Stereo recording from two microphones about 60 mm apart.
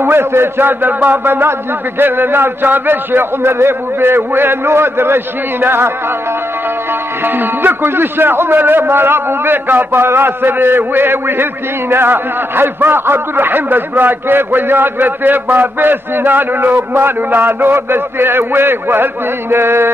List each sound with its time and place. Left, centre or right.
0.0 s a man's voice: right
7.2 s a man's voice: right